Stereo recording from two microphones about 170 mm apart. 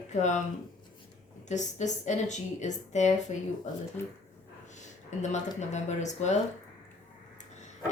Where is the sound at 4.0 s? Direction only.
15° left (ahead or behind).